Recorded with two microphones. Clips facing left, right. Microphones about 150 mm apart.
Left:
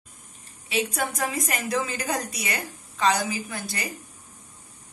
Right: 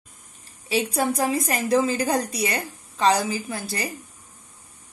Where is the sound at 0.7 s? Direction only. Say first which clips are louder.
Right 4 dB; 30° right (ahead or behind).